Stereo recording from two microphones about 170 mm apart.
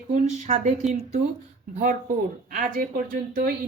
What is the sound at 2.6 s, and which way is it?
Speech, 55° right (ahead or behind).